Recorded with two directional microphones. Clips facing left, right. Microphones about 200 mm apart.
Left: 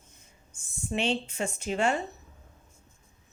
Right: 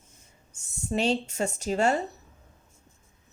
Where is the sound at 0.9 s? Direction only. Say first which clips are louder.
Right 3 dB; 40° right (ahead or behind).